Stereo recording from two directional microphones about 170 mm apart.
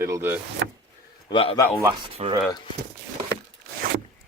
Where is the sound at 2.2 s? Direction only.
40° right (ahead or behind).